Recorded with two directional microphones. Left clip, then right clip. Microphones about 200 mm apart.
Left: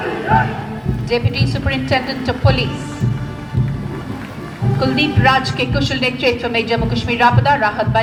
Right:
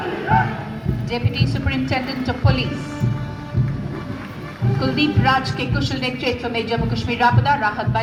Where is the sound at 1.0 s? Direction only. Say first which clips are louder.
Left 6 dB; 45° left (ahead or behind).